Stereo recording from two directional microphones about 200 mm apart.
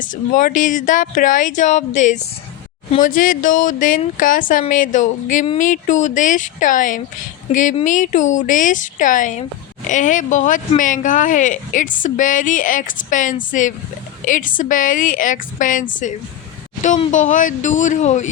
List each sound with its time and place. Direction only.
0.0 s speech: 40° left (ahead or behind)